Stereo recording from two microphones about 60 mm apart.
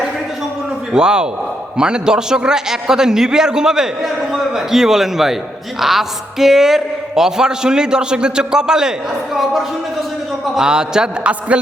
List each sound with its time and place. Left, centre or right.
0.9 s a man's voice: centre